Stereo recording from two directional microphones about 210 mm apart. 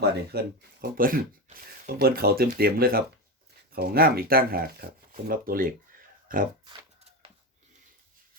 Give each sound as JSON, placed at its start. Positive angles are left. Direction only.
{"t": 0.3, "sound": "speech", "side_deg": -45}